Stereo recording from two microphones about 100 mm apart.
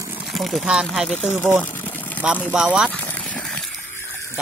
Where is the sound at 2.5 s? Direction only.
10° right (ahead or behind).